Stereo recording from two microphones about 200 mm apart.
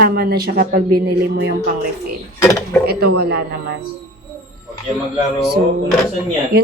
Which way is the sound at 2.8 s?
55° right (ahead or behind).